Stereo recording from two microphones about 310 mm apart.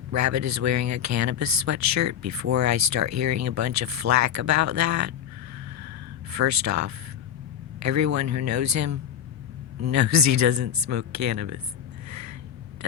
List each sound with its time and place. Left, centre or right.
0.1 s speech: right
6.3 s speech: right
12.0 s a sound: right